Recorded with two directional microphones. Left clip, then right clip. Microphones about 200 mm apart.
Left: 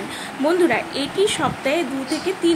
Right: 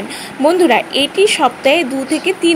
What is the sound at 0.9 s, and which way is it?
Speech, 90° right.